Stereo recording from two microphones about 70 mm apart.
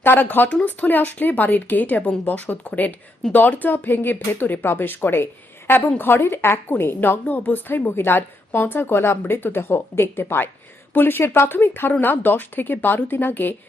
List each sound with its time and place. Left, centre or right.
0.0 s a woman's voice: left